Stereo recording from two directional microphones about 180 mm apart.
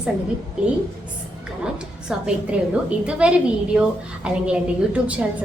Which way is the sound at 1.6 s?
5° right (ahead or behind).